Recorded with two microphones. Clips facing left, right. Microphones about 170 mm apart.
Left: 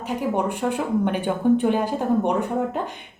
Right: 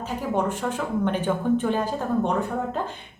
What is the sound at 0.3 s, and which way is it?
A woman's voice, 15° left (ahead or behind).